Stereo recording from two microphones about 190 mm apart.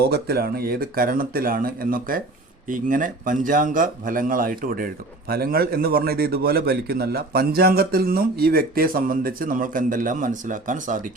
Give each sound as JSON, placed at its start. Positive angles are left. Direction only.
{"t": 0.0, "sound": "a man's voice", "side_deg": -55}